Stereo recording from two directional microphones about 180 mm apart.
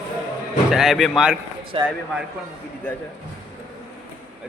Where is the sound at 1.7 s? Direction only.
30° right (ahead or behind).